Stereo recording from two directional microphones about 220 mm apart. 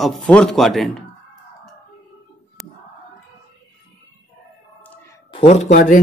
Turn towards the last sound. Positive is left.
turn(degrees=35)  # may be behind; listen again after turning